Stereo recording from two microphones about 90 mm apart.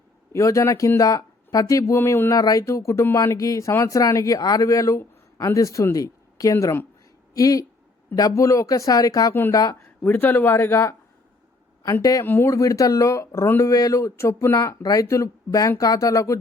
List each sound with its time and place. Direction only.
0.3 s speech: 35° left (ahead or behind)
2.0 s speech: 25° left (ahead or behind)
2.3 s speech: 40° left (ahead or behind)
3.2 s speech: 40° left (ahead or behind)
10.0 s speech: 20° left (ahead or behind)
12.2 s speech: 25° left (ahead or behind)
12.5 s speech: 40° left (ahead or behind)
13.7 s speech: 40° left (ahead or behind)
14.8 s speech: 40° left (ahead or behind)